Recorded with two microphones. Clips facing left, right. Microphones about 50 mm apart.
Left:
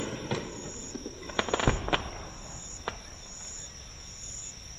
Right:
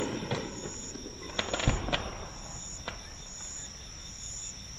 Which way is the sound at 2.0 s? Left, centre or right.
Centre.